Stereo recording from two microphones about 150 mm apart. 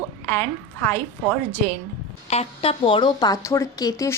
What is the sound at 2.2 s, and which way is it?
A woman's voice, 45° left (ahead or behind).